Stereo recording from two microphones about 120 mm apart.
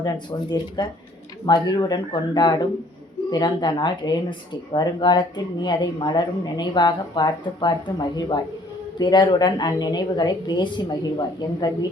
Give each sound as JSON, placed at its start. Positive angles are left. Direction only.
{"t": 0.0, "sound": "a woman's voice", "side_deg": 35}